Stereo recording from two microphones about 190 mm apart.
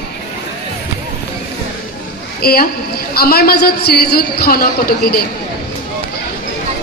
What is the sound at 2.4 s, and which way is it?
A man's voice, 55° left (ahead or behind).